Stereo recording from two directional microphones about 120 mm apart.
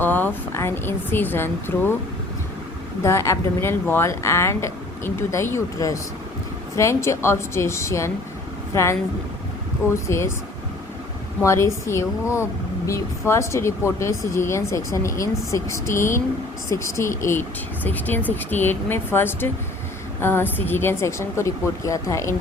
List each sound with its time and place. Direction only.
0.0 s speech: 15° left (ahead or behind)
3.0 s speech: 25° left (ahead or behind)
11.4 s speech: 25° left (ahead or behind)
17.8 s speech: 15° left (ahead or behind)